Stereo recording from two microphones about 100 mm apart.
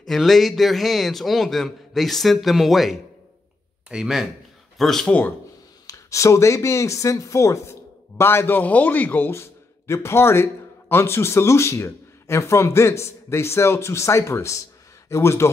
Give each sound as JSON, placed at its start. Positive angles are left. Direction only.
{"t": 0.0, "sound": "a man's voice", "side_deg": 5}
{"t": 5.9, "sound": "a man's voice", "side_deg": 30}